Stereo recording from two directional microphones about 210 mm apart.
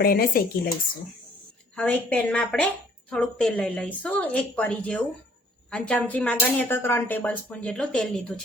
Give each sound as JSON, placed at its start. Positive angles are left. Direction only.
{"t": 0.0, "sound": "speech", "side_deg": 45}
{"t": 1.7, "sound": "a woman's voice", "side_deg": 5}